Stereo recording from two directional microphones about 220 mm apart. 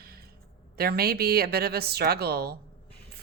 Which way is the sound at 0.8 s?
45° right (ahead or behind).